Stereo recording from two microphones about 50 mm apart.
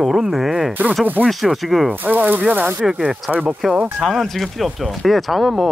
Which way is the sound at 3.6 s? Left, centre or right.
Centre.